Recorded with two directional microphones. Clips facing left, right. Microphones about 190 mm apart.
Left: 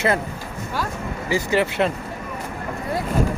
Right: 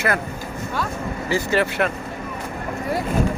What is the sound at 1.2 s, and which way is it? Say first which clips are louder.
Speech: even; 15° left (ahead or behind).